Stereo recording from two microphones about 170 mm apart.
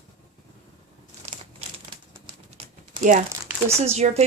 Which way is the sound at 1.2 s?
35° right (ahead or behind).